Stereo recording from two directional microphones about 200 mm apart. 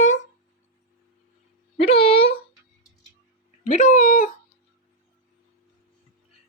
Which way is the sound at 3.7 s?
40° left (ahead or behind).